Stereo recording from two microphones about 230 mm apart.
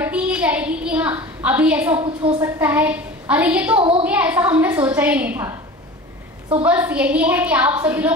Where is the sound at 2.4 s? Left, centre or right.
Centre.